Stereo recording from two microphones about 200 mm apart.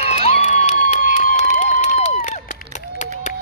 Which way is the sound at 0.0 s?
30° left (ahead or behind).